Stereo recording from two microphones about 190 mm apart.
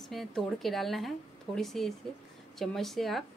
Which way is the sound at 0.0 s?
Centre (ahead or behind).